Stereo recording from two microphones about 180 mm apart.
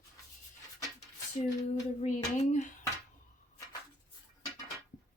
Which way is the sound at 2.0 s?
40° left (ahead or behind).